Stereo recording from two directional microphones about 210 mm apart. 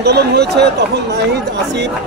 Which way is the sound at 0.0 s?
50° right (ahead or behind).